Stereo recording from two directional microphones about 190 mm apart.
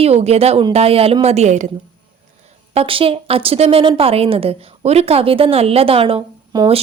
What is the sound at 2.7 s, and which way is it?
A woman's voice, 30° right (ahead or behind).